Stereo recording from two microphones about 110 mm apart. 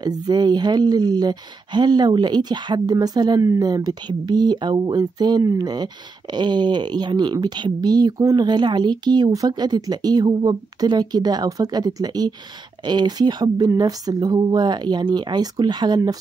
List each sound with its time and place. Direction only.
0.0 s speech: 40° right (ahead or behind)